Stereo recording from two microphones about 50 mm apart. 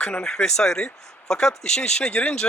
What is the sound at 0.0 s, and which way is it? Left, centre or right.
Speech, centre.